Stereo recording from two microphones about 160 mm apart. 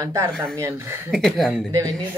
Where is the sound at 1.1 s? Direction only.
5° left (ahead or behind).